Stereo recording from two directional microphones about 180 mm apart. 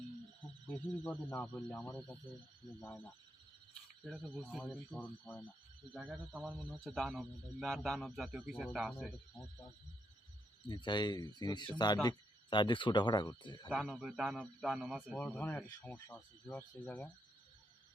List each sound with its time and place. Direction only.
0.7 s a man's voice: 10° left (ahead or behind)
9.4 s speech: 20° left (ahead or behind)
13.7 s a man's voice: 5° right (ahead or behind)
15.1 s speech: 10° left (ahead or behind)